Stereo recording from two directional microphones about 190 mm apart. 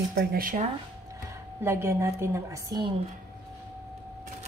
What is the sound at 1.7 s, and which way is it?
A woman's voice, 15° right (ahead or behind).